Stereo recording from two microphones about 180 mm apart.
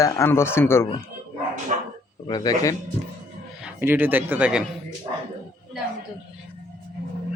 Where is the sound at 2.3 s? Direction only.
20° left (ahead or behind).